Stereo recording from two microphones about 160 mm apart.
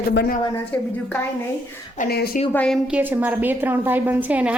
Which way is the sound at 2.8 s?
10° right (ahead or behind).